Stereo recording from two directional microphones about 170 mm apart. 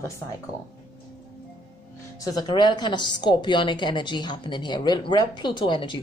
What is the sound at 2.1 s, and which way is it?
A woman's voice, 25° left (ahead or behind).